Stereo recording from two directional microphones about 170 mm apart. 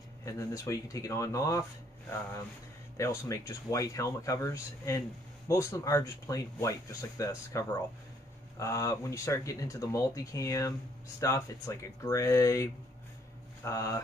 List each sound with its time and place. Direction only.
0.2 s speech: 20° left (ahead or behind)
3.0 s speech: 20° left (ahead or behind)
13.7 s speech: 20° left (ahead or behind)